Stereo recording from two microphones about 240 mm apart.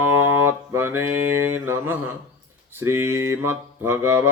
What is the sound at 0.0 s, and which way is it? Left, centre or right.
Mantra, centre.